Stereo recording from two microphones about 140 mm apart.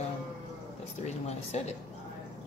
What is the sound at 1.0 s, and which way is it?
Speech, 50° left (ahead or behind).